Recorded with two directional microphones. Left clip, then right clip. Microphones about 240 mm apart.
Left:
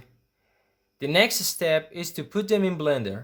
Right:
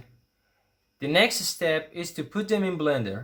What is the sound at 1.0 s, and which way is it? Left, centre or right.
Speech, left.